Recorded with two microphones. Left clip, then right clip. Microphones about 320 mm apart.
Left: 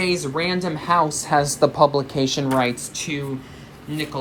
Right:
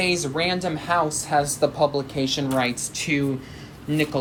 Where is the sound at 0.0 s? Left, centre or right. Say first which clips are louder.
Left 1 dB; centre.